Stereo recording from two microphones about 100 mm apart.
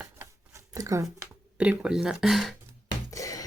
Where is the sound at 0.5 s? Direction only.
35° right (ahead or behind).